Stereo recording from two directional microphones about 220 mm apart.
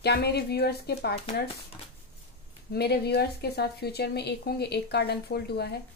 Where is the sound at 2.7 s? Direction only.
45° left (ahead or behind).